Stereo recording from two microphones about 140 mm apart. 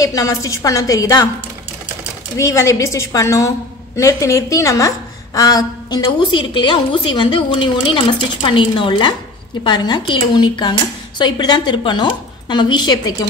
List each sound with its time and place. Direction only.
0.0 s a woman's voice: 25° left (ahead or behind)
2.3 s a woman's voice: 20° left (ahead or behind)